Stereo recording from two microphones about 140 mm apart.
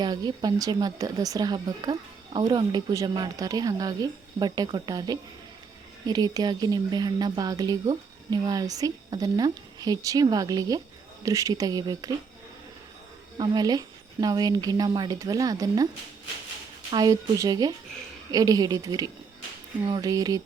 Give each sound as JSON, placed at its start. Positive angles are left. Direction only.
{"t": 0.0, "sound": "speech", "side_deg": -30}
{"t": 13.4, "sound": "speech", "side_deg": -30}
{"t": 16.9, "sound": "speech", "side_deg": -30}